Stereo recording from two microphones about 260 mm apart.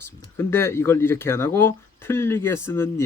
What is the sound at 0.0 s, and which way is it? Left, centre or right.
Speech, centre.